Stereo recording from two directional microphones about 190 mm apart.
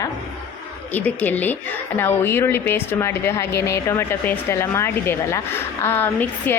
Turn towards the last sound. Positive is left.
turn(degrees=10)  # may be behind; listen again after turning